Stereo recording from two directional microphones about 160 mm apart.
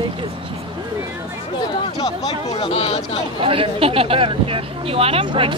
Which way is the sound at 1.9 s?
25° left (ahead or behind).